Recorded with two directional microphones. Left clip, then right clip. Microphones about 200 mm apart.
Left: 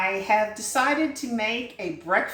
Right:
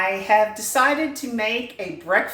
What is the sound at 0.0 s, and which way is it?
A woman's voice, 20° right (ahead or behind).